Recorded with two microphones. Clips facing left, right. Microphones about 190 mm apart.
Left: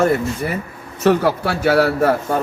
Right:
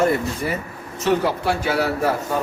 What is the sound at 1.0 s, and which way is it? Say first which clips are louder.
Speech: left 4 dB; 60° left (ahead or behind).